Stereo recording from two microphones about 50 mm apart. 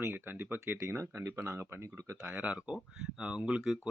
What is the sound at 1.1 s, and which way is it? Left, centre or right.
Speech, right.